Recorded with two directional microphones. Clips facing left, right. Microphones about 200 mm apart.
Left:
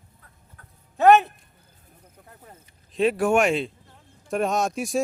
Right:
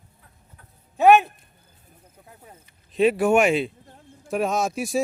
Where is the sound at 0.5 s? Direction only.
15° right (ahead or behind).